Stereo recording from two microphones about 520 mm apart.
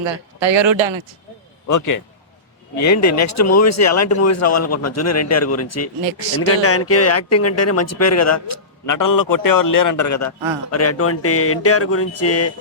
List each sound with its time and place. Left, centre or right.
0.0 s speech: right
1.6 s speech: left